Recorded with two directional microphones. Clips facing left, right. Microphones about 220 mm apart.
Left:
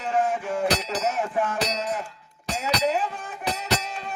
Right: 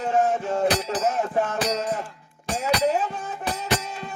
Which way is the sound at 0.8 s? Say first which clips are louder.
Right 2 dB; 50° right (ahead or behind).